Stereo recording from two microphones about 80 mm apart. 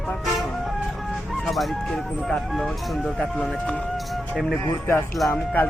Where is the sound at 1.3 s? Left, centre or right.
Centre.